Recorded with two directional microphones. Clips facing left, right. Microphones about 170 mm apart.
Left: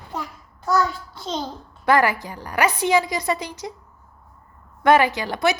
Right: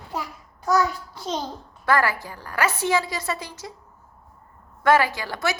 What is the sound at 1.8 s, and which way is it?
A woman's voice, 20° left (ahead or behind).